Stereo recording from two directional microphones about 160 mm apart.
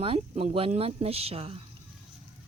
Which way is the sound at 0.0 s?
35° right (ahead or behind).